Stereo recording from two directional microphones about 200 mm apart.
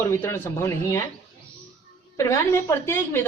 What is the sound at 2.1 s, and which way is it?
Speech, 15° left (ahead or behind).